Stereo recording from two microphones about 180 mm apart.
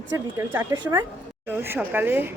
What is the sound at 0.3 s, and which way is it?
Speech, 15° right (ahead or behind).